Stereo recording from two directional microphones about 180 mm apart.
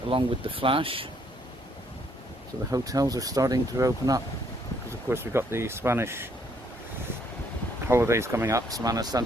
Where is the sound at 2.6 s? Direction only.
20° right (ahead or behind).